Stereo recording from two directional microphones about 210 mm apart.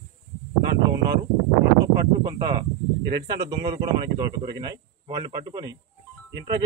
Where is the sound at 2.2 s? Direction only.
20° right (ahead or behind).